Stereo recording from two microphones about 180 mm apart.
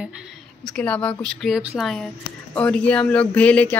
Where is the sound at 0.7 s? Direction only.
5° left (ahead or behind).